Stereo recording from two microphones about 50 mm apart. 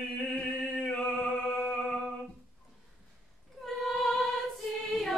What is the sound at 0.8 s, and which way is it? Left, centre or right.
Music, centre.